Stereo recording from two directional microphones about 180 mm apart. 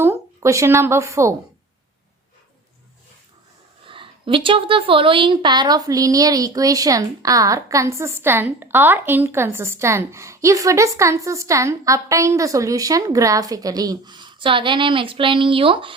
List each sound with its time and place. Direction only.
0.0 s a woman's voice: 15° right (ahead or behind)
3.8 s a woman's voice: 30° right (ahead or behind)